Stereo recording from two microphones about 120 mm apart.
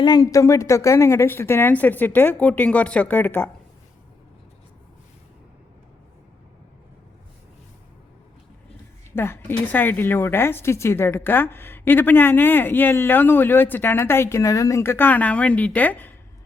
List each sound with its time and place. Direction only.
0.0 s a woman's voice: 30° left (ahead or behind); by 3.5 s 15° left (ahead or behind)
9.1 s a woman's voice: 20° left (ahead or behind)